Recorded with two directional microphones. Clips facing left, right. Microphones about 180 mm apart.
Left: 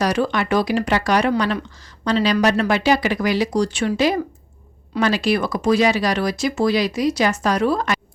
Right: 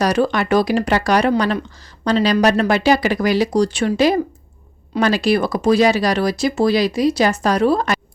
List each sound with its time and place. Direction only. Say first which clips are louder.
0.0 s speech: right 3 dB; 40° right (ahead or behind)